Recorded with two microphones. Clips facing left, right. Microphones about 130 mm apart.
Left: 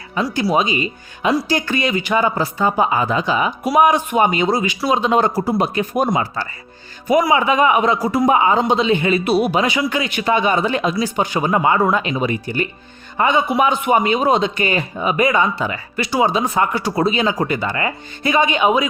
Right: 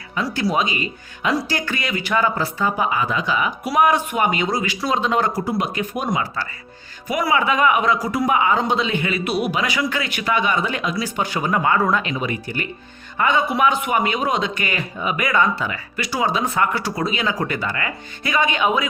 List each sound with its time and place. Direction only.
0.4 s a man's voice: 25° left (ahead or behind)
3.7 s a man's voice: 15° left (ahead or behind)